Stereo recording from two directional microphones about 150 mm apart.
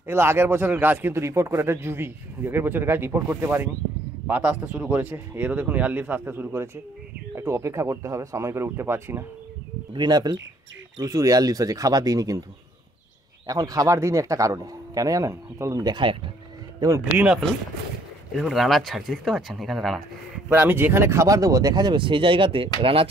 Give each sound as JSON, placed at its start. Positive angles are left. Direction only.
{"t": 0.0, "sound": "a man's voice", "side_deg": -15}
{"t": 9.9, "sound": "speech", "side_deg": -30}
{"t": 13.5, "sound": "speech", "side_deg": -25}
{"t": 16.8, "sound": "speech", "side_deg": -20}
{"t": 18.3, "sound": "speech", "side_deg": 0}
{"t": 20.4, "sound": "speech", "side_deg": -15}